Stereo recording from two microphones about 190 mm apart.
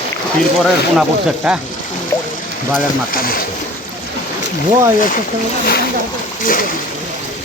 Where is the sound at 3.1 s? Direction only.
50° left (ahead or behind).